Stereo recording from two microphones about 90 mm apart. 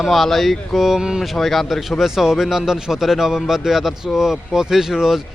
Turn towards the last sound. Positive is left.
turn(degrees=-5)  # may be behind; listen again after turning